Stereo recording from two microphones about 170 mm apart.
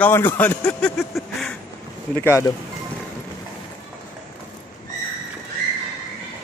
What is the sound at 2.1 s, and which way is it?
Speech, 15° left (ahead or behind).